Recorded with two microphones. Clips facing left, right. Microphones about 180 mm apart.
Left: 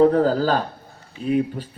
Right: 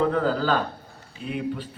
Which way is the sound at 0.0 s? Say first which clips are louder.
Left 6 dB; 40° left (ahead or behind).